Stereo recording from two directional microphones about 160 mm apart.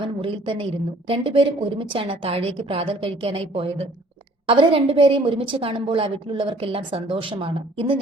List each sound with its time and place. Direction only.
0.0 s a woman's voice: 35° right (ahead or behind)